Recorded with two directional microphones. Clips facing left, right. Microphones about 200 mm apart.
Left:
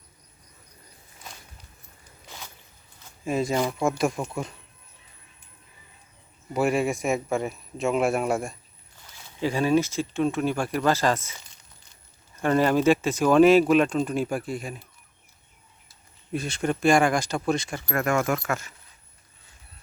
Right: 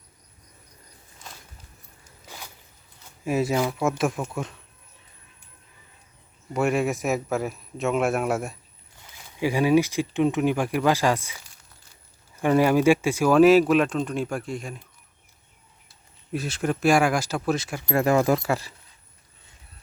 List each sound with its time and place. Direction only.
3.2 s speech: 5° right (ahead or behind)
6.5 s speech: centre (ahead or behind)
9.4 s speech: 15° right (ahead or behind); by 14.8 s 5° left (ahead or behind)
16.3 s speech: 5° right (ahead or behind)
17.8 s speech: 30° right (ahead or behind)